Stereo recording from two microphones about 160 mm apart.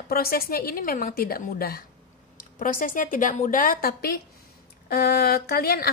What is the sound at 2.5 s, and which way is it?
A woman's voice, 55° left (ahead or behind).